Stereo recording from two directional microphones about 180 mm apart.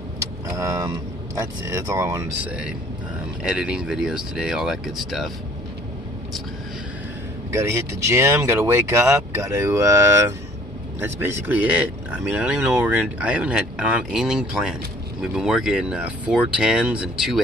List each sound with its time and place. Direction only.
0.6 s speech: 20° right (ahead or behind); by 5.3 s centre (ahead or behind)
7.5 s speech: 15° right (ahead or behind)